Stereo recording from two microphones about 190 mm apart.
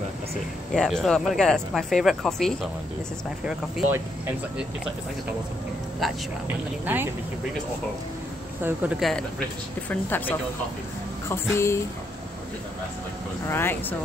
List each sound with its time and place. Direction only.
0.7 s speech: centre (ahead or behind)
6.4 s speech: 10° right (ahead or behind)
8.6 s speech: 5° right (ahead or behind)
9.8 s speech: 10° left (ahead or behind)
13.5 s speech: 10° left (ahead or behind)